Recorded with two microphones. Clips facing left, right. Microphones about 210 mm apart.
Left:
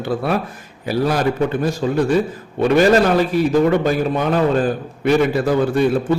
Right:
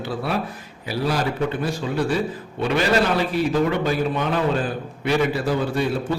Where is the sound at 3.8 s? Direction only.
45° left (ahead or behind).